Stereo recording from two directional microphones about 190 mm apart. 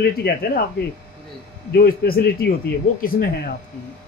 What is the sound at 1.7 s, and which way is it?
Speech, 50° left (ahead or behind).